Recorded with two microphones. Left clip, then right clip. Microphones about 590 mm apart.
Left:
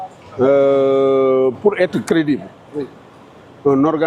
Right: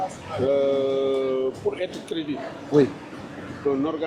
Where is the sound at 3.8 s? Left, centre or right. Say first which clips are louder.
Left 11 dB; left.